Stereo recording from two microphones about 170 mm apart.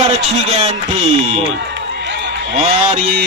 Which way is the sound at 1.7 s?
90° right.